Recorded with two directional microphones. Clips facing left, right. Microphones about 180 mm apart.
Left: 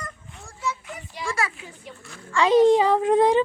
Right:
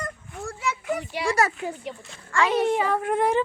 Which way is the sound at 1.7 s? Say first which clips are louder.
Right 8 dB; 70° right (ahead or behind).